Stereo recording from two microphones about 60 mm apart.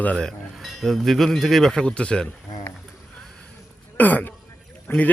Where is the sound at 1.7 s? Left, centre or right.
Centre.